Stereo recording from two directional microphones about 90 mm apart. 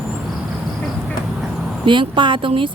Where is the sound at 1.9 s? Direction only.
65° right (ahead or behind).